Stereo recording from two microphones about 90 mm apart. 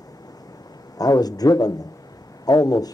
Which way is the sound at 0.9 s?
45° left (ahead or behind).